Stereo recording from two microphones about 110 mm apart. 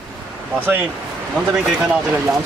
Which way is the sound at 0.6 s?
20° right (ahead or behind).